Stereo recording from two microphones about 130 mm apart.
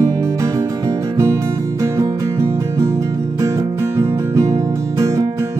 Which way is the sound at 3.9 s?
25° right (ahead or behind).